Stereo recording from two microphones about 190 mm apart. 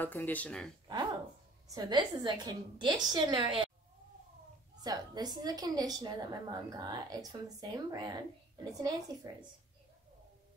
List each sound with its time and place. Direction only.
0.0 s speech: 10° left (ahead or behind)
1.7 s a woman's voice: 20° right (ahead or behind)
4.8 s a woman's voice: 20° right (ahead or behind)